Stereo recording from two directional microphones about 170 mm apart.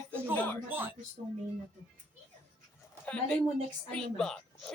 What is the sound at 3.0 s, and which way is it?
Speech, 5° left (ahead or behind).